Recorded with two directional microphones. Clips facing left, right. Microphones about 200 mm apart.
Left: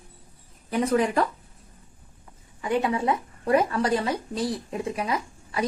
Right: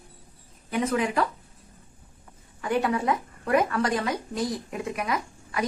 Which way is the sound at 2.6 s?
20° left (ahead or behind).